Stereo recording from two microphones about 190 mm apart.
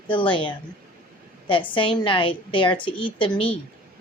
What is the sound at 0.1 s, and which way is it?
Speech, 25° left (ahead or behind).